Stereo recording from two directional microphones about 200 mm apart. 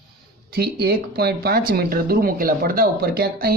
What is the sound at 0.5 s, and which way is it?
Speech, 50° right (ahead or behind).